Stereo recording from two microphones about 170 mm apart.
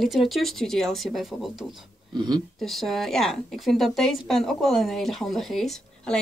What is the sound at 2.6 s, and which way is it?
A woman's voice, centre (ahead or behind).